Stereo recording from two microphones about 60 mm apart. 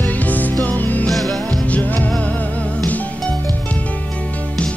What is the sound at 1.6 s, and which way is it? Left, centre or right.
Music, left.